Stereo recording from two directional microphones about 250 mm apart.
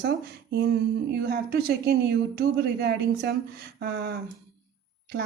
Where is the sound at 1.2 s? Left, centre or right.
Right.